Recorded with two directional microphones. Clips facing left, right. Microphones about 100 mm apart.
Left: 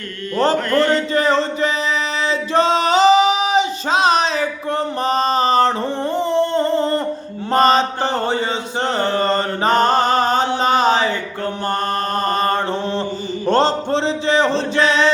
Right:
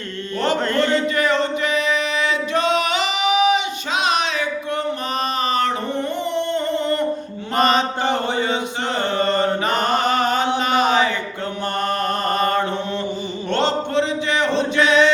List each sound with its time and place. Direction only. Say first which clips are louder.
0.7 s speech: left 3 dB; 25° right (ahead or behind)
1.1 s music: left 2 dB; 35° left (ahead or behind)
2.5 s singing: left 6 dB; 30° left (ahead or behind)
6.1 s a sound: left 8 dB; 35° left (ahead or behind)
7.5 s mantra: left 4 dB; 35° left (ahead or behind)
9.0 s chant: left 1 dB; 35° left (ahead or behind)
10.6 s a sound: left 2 dB; 30° left (ahead or behind)
12.2 s mantra: left 1 dB; 35° left (ahead or behind)
13.5 s music: left 4 dB; 35° left (ahead or behind)